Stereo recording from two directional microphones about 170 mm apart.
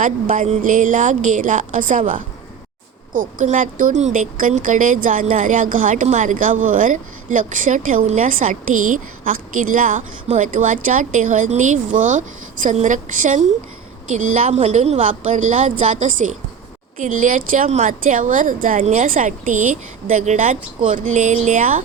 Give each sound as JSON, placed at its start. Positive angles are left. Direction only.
{"t": 0.0, "sound": "speech", "side_deg": -50}